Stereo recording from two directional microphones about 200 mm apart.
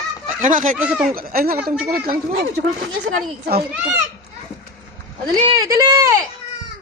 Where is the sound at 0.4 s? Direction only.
40° right (ahead or behind).